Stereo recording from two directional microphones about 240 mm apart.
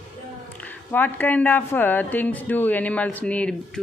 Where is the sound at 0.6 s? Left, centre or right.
Centre.